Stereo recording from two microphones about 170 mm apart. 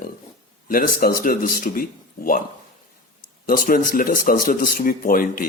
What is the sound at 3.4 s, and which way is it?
Speech, 55° left (ahead or behind).